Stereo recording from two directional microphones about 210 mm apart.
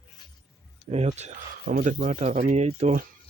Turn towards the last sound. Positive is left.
turn(degrees=-35)  # may be behind; listen again after turning